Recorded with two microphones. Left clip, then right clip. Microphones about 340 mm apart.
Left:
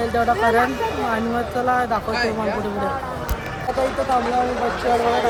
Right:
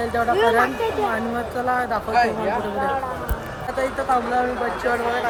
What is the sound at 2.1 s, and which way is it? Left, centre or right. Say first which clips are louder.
Speech: right 2 dB; right.